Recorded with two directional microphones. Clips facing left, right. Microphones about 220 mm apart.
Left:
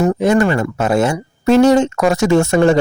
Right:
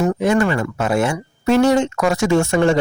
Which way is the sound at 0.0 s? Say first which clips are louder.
Left 3 dB; 45° left (ahead or behind).